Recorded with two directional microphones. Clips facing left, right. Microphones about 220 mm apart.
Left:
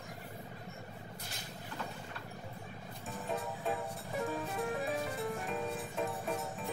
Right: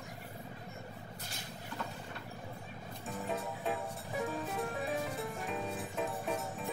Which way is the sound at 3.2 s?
Centre (ahead or behind).